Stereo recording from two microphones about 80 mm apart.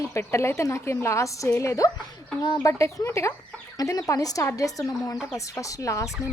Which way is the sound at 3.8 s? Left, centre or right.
Left.